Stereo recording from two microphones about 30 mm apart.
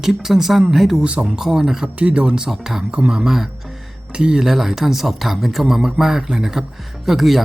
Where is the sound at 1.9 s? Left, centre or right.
Right.